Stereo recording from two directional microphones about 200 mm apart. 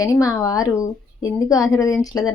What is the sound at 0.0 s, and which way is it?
A woman's voice, 15° left (ahead or behind).